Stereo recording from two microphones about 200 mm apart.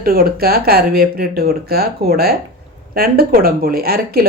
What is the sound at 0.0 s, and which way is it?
Speech, 45° right (ahead or behind).